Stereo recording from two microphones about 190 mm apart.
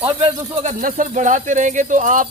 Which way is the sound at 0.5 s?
40° right (ahead or behind).